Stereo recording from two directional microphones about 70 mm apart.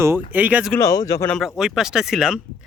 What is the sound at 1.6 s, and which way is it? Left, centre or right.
Speech, centre.